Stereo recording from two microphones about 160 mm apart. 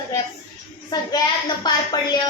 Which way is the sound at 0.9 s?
25° left (ahead or behind).